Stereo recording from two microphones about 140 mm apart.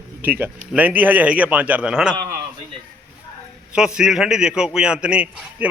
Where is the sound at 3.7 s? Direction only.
5° right (ahead or behind).